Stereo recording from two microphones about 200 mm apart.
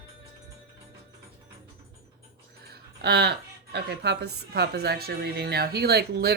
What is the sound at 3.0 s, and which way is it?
Speech, 55° right (ahead or behind).